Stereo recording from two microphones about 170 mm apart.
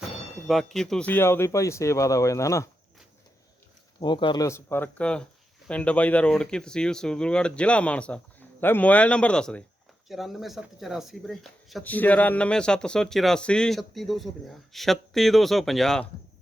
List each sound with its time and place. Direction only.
0.4 s speech: centre (ahead or behind); by 2.6 s 20° left (ahead or behind)
4.0 s speech: 25° left (ahead or behind); by 16.0 s centre (ahead or behind)